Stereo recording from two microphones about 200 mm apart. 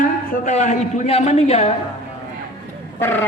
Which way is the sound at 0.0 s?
40° left (ahead or behind).